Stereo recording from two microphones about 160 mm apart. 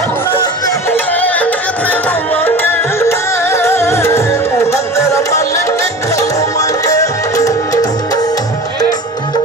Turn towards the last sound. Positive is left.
turn(degrees=20)  # may be behind; listen again after turning